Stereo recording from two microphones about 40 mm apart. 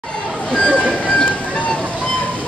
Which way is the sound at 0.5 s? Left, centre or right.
Centre.